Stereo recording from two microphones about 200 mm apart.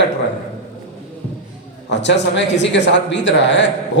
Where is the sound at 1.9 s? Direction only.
60° left (ahead or behind).